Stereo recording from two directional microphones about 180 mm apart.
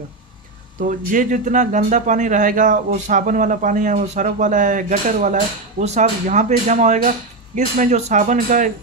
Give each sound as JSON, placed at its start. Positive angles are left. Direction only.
{"t": 0.7, "sound": "speech", "side_deg": -45}